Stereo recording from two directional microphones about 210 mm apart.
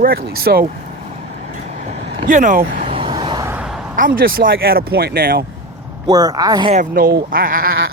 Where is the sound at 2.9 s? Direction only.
25° right (ahead or behind).